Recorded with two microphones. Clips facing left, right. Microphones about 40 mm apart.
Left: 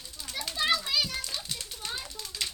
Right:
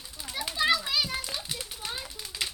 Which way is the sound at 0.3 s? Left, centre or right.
Centre.